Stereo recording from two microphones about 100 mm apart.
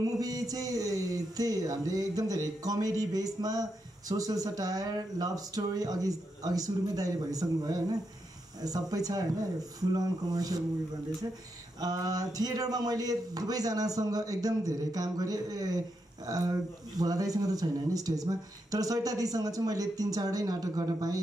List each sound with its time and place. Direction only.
0.2 s speech: 35° right (ahead or behind)
11.8 s speech: 40° right (ahead or behind)